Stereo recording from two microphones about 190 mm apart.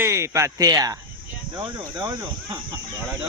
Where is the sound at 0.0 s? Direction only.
15° right (ahead or behind).